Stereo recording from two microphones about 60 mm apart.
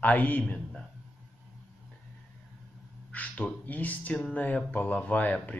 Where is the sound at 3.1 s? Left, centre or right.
Left.